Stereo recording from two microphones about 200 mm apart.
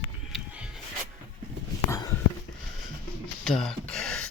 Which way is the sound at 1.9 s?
15° left (ahead or behind).